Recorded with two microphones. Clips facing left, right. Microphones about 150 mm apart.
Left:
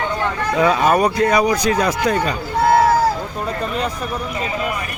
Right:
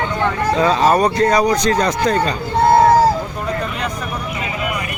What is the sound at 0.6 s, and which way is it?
Speech, 10° left (ahead or behind).